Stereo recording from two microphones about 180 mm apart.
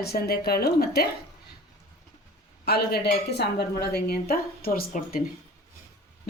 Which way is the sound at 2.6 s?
60° left (ahead or behind).